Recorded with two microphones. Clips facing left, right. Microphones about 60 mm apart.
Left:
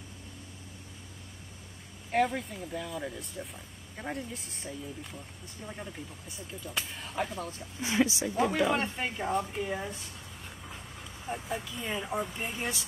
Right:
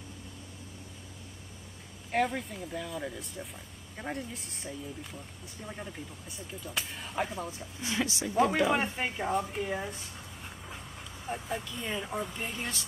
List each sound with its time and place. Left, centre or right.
2.0 s speech: centre
7.8 s speech: left
8.5 s speech: centre
11.2 s speech: centre